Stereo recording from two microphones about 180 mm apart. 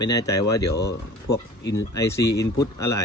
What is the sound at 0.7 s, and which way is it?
Speech, 65° left (ahead or behind).